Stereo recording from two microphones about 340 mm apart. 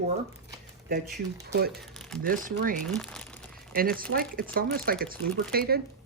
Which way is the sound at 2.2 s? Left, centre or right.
Right.